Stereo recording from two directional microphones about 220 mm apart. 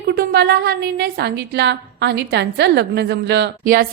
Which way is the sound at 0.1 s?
45° right (ahead or behind).